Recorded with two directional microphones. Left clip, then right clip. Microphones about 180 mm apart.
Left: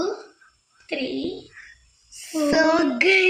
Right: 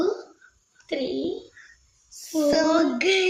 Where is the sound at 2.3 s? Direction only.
20° left (ahead or behind).